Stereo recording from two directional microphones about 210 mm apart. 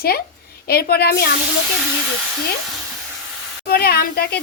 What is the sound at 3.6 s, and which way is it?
Speech, 50° left (ahead or behind).